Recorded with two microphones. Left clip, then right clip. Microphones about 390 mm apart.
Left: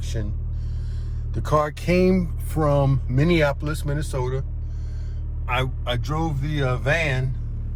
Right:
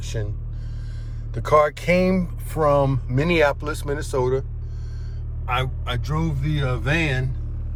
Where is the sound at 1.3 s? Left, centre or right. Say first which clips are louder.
Right 5 dB; centre.